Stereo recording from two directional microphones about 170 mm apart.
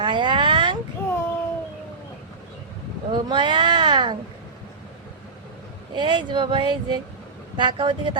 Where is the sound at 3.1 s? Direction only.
25° right (ahead or behind).